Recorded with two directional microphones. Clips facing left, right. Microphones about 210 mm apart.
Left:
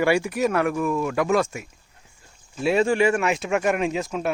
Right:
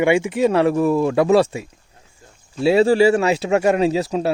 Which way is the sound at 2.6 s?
35° right (ahead or behind).